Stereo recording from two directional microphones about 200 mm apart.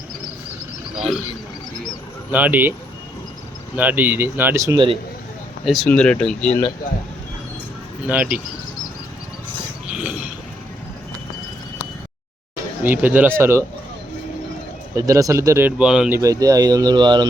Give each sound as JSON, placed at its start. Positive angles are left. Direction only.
{"t": 0.9, "sound": "speech", "side_deg": 0}
{"t": 2.3, "sound": "speech", "side_deg": -10}
{"t": 3.8, "sound": "speech", "side_deg": -10}
{"t": 5.6, "sound": "speech", "side_deg": 0}
{"t": 8.0, "sound": "speech", "side_deg": -5}
{"t": 9.9, "sound": "a sound", "side_deg": -5}
{"t": 12.8, "sound": "speech", "side_deg": -10}
{"t": 14.9, "sound": "speech", "side_deg": -15}